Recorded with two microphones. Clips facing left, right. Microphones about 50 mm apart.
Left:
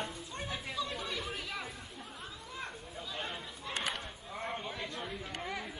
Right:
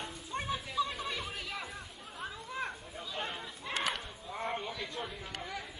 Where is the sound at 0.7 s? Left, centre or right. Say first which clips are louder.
Right 3 dB; centre.